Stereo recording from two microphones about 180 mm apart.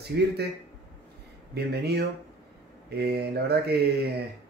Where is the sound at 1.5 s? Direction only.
65° right (ahead or behind).